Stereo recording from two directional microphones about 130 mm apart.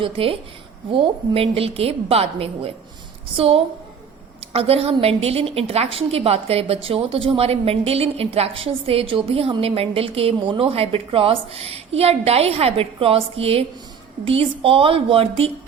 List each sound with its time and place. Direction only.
0.0 s a woman's voice: 45° right (ahead or behind)